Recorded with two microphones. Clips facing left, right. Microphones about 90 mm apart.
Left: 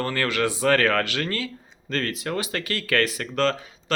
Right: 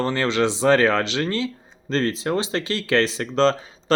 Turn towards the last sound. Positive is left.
turn(degrees=-25)  # may be behind; listen again after turning